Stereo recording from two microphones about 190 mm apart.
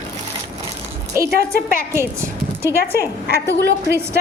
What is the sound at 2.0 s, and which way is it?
A woman's voice, 15° right (ahead or behind).